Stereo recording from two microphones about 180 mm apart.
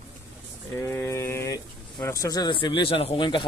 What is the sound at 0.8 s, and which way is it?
Speech, 15° left (ahead or behind).